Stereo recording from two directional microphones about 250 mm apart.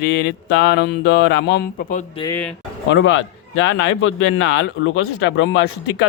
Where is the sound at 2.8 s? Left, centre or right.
Left.